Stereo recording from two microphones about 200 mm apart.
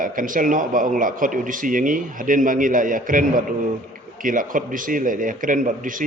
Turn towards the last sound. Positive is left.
turn(degrees=-40)  # may be behind; listen again after turning